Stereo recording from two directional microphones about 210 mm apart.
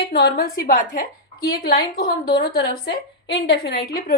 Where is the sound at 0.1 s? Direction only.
50° left (ahead or behind).